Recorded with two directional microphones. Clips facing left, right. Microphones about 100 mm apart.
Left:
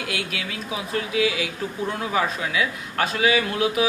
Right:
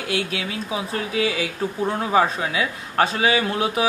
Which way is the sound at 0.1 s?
30° right (ahead or behind).